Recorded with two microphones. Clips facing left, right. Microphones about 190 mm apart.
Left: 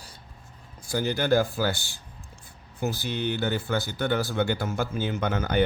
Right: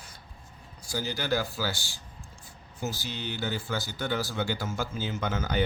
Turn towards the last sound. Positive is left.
turn(degrees=60)  # may be behind; listen again after turning